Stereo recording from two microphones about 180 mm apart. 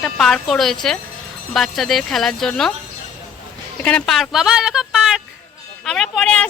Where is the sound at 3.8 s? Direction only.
5° left (ahead or behind).